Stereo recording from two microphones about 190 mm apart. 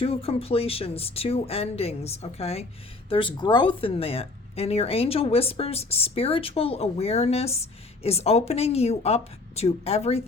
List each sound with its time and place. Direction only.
0.0 s speech: 30° left (ahead or behind)